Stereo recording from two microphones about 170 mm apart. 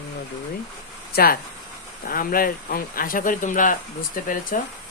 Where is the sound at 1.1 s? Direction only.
65° left (ahead or behind).